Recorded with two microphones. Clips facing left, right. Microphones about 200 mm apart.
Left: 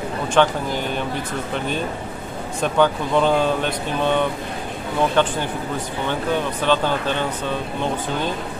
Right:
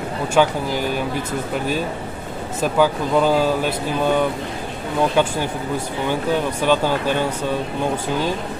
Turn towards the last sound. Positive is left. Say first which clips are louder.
# right 2 dB
turn(degrees=-10)  # may be behind; listen again after turning